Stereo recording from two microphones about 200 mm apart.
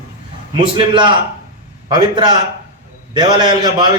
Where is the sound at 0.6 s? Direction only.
25° right (ahead or behind).